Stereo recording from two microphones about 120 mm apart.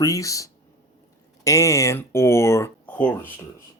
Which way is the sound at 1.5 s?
25° left (ahead or behind).